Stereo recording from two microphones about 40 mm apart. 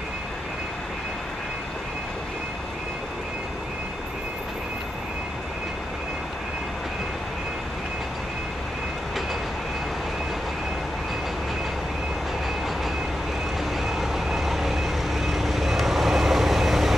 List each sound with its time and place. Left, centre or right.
13.8 s vehicle: centre